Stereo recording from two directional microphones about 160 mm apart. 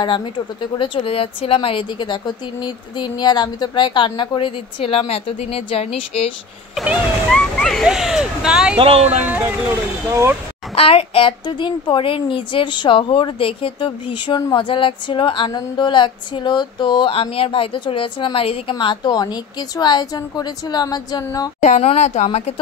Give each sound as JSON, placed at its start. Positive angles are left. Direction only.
{"t": 0.7, "sound": "speech", "side_deg": 35}
{"t": 6.7, "sound": "speech", "side_deg": -5}
{"t": 8.7, "sound": "speech", "side_deg": -40}
{"t": 9.2, "sound": "speech", "side_deg": -10}
{"t": 10.7, "sound": "speech", "side_deg": 40}
{"t": 21.6, "sound": "a woman's voice", "side_deg": 45}